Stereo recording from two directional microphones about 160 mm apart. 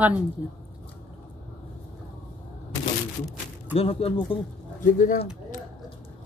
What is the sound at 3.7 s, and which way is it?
Speech, 35° left (ahead or behind).